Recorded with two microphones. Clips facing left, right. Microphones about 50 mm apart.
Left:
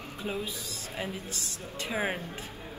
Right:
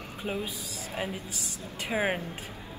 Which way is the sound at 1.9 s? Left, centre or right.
Right.